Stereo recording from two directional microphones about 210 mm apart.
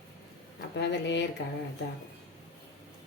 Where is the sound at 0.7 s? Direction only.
55° left (ahead or behind).